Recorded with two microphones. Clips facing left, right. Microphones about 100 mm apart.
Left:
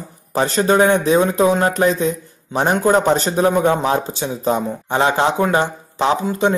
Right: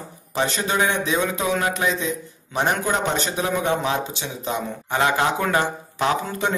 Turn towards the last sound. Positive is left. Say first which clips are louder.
# left 6 dB
turn(degrees=25)  # may be behind; listen again after turning